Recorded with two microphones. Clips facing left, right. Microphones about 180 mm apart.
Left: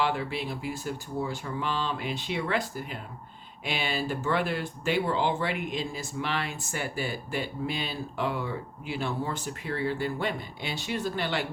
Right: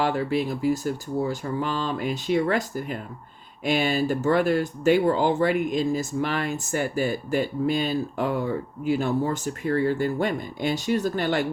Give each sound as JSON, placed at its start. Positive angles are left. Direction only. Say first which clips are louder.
{"t": 0.0, "sound": "speech", "louder": "right 5 dB", "side_deg": -40}